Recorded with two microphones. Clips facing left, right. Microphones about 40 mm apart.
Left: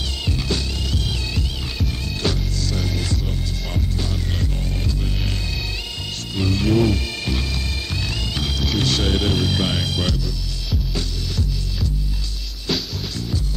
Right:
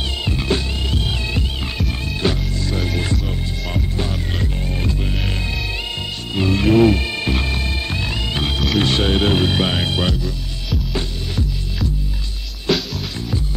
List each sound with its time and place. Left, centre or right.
0.2 s music: right
6.3 s music: right
12.7 s music: centre